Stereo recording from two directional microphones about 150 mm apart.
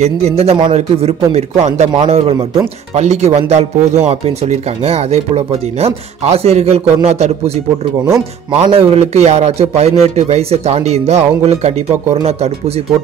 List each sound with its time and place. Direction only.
0.0 s speech: 45° right (ahead or behind)
2.3 s speech: 20° right (ahead or behind)
2.9 s speech: 50° right (ahead or behind)
8.0 s speech: 25° right (ahead or behind)
8.5 s speech: 40° right (ahead or behind)